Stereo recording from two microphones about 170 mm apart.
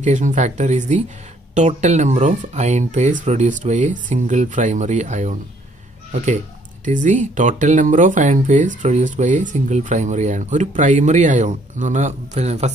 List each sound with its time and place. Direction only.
0.0 s speech: 45° right (ahead or behind)